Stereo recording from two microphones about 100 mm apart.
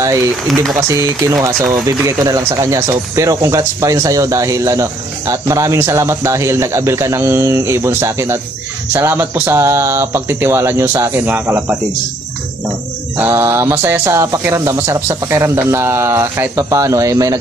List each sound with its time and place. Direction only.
0.0 s speech: 30° right (ahead or behind)
13.3 s speech: 30° right (ahead or behind)